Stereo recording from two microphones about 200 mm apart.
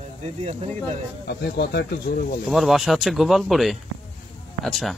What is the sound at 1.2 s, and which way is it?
Speech, 55° left (ahead or behind).